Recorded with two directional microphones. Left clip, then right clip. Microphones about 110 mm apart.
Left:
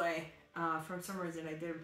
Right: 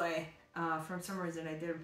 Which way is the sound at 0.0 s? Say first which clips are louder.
Even; centre (ahead or behind).